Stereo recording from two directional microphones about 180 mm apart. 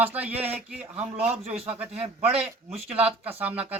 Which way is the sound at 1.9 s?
35° right (ahead or behind).